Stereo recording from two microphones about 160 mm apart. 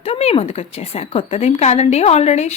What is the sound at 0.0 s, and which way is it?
A woman's voice, 40° left (ahead or behind).